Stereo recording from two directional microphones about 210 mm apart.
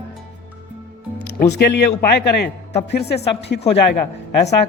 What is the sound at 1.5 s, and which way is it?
Speech, 55° left (ahead or behind).